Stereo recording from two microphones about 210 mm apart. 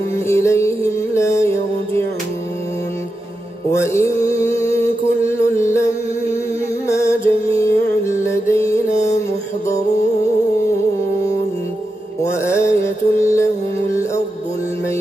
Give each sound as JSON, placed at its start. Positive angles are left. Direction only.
{"t": 0.1, "sound": "music", "side_deg": 15}
{"t": 3.7, "sound": "music", "side_deg": 15}
{"t": 6.9, "sound": "music", "side_deg": 15}
{"t": 8.9, "sound": "music", "side_deg": 35}
{"t": 12.2, "sound": "music", "side_deg": 15}